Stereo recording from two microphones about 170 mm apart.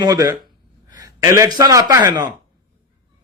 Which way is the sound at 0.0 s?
25° right (ahead or behind).